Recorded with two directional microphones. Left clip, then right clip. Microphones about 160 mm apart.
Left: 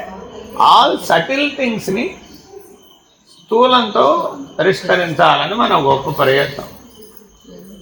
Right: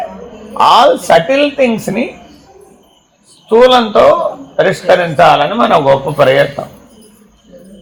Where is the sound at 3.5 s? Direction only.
55° right (ahead or behind).